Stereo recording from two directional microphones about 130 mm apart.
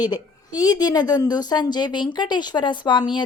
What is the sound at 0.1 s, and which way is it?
A woman's voice, 30° left (ahead or behind).